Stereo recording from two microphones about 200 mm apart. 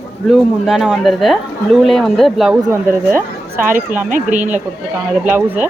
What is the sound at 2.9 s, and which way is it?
Speech, 10° right (ahead or behind).